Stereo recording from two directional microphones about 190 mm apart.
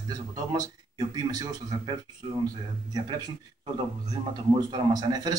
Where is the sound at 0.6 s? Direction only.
20° right (ahead or behind).